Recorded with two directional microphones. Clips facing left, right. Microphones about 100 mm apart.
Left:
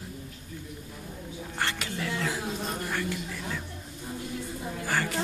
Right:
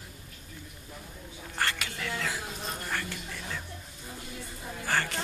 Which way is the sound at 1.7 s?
30° left (ahead or behind).